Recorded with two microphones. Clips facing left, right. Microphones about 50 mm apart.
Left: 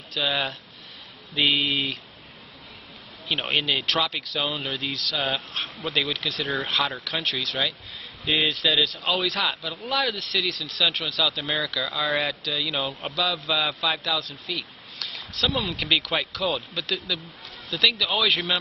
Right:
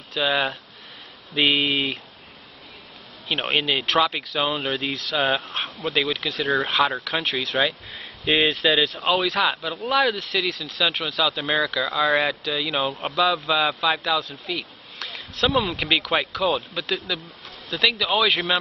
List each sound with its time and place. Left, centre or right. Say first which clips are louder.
0.1 s speech: right 4 dB; centre
3.3 s speech: right 2 dB; centre
5.8 s speech: right 3 dB; centre
8.3 s speech: right 4 dB; right
9.0 s speech: right 4 dB; centre
12.8 s a man's voice: right 5 dB; centre
14.4 s a man's voice: right 3 dB; centre
15.1 s a sound: right 4 dB; right
15.5 s speech: right 3 dB; centre